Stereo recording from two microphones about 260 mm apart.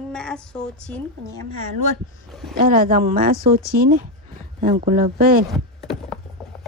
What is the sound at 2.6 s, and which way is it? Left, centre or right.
Speech, right.